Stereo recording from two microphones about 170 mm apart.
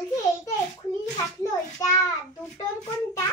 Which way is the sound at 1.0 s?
20° left (ahead or behind).